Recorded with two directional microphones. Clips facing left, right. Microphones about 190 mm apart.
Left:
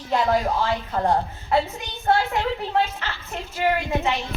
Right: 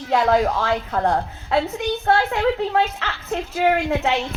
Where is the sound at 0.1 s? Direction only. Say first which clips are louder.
Right 3 dB; 75° right (ahead or behind).